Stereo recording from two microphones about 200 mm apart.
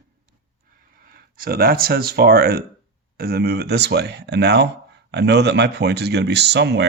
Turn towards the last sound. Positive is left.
turn(degrees=-60)  # may be behind; listen again after turning